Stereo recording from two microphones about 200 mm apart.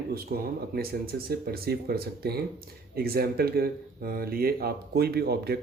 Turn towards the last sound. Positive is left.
turn(degrees=-50)  # may be behind; listen again after turning